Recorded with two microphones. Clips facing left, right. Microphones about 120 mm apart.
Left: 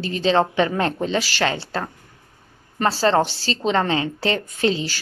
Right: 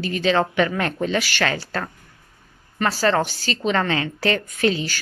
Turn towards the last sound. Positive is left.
turn(degrees=25)  # may be behind; listen again after turning